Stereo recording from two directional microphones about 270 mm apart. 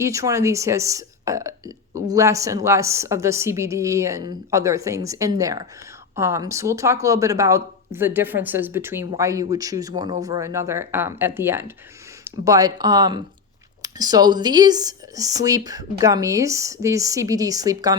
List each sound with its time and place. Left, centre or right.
0.0 s speech: centre